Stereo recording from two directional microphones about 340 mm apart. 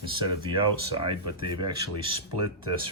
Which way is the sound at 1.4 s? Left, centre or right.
Right.